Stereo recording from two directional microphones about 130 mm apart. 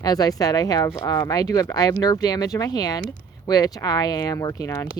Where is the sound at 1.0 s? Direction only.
30° left (ahead or behind).